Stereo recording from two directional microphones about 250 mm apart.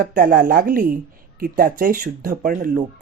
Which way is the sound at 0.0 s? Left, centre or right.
Right.